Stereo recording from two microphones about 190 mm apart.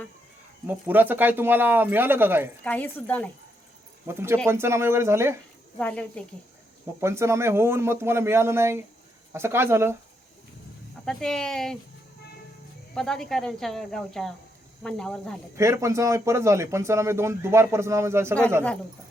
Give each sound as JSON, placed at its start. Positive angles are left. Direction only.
{"t": 0.7, "sound": "speech", "side_deg": -10}
{"t": 2.6, "sound": "a woman's voice", "side_deg": 10}
{"t": 4.0, "sound": "speech", "side_deg": -10}
{"t": 5.7, "sound": "speech", "side_deg": 5}
{"t": 7.0, "sound": "speech", "side_deg": -15}
{"t": 11.0, "sound": "speech", "side_deg": 5}
{"t": 12.9, "sound": "speech", "side_deg": 5}
{"t": 15.5, "sound": "speech", "side_deg": -15}